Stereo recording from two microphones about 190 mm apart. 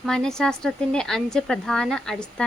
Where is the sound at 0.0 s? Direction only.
5° left (ahead or behind).